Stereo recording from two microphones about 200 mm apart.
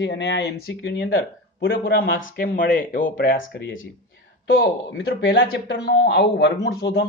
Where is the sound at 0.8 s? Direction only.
50° left (ahead or behind).